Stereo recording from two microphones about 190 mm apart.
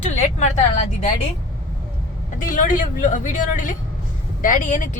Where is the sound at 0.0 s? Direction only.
40° left (ahead or behind).